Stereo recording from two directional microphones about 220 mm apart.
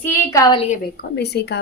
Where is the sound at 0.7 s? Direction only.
45° left (ahead or behind).